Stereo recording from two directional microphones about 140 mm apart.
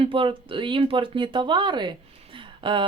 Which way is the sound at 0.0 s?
40° right (ahead or behind).